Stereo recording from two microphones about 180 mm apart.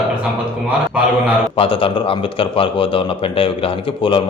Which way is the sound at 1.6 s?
30° left (ahead or behind).